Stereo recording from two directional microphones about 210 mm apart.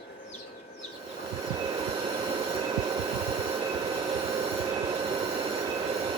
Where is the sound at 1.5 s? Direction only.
20° right (ahead or behind).